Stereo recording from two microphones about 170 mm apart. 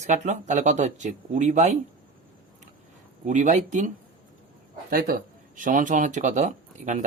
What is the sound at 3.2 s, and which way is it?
Speech, 45° right (ahead or behind).